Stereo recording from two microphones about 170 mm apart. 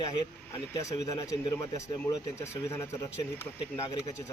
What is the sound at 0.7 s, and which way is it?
Speech, 20° left (ahead or behind).